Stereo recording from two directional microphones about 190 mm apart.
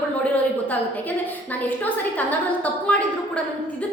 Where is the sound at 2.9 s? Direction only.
5° left (ahead or behind).